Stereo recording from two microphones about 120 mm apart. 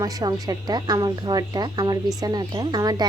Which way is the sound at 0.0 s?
30° right (ahead or behind).